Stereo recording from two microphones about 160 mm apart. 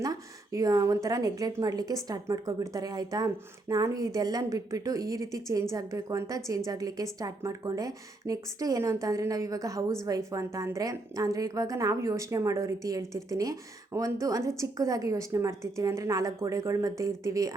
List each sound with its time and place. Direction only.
0.0 s speech: 20° right (ahead or behind)